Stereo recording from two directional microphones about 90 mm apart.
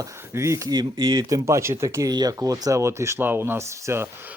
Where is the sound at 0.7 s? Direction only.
50° right (ahead or behind).